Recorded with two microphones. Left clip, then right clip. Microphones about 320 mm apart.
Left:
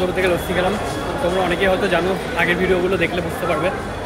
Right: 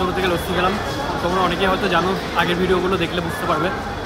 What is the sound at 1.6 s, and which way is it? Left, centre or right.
Speech, centre.